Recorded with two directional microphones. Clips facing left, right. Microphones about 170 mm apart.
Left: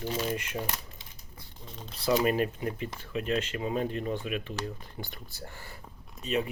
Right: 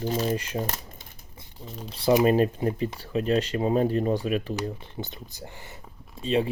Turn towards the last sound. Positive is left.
turn(degrees=-30)  # may be behind; listen again after turning